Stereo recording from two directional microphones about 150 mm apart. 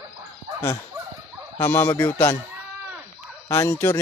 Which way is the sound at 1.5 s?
15° left (ahead or behind).